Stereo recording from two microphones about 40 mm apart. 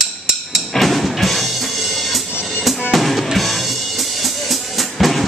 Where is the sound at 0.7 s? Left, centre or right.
Centre.